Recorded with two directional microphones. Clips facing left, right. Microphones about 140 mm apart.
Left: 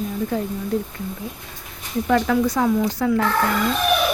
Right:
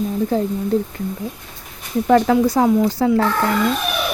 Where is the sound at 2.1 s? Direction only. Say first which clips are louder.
Right 5 dB; 35° right (ahead or behind).